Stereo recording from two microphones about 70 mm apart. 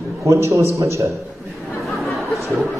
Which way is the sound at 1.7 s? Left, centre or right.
Centre.